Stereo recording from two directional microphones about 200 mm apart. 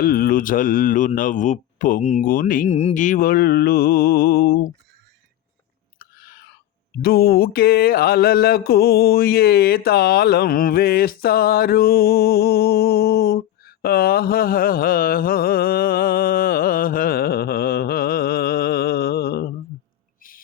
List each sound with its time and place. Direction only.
0.0 s mantra: 45° left (ahead or behind)
6.0 s chewing: 50° left (ahead or behind)
7.0 s mantra: 50° left (ahead or behind)